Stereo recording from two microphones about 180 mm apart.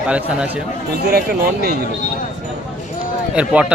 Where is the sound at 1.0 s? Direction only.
60° right (ahead or behind).